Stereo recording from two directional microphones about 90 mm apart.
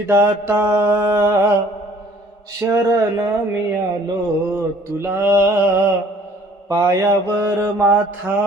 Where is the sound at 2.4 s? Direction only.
35° right (ahead or behind).